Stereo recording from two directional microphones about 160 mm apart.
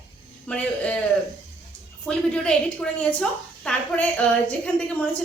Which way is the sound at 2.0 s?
5° left (ahead or behind).